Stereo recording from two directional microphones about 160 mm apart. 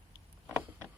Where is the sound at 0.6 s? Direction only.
10° right (ahead or behind).